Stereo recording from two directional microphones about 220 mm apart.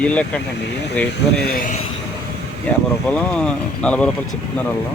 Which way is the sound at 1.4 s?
45° left (ahead or behind).